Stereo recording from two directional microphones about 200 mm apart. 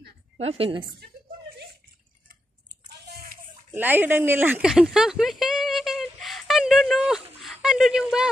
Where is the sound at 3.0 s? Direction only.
50° right (ahead or behind).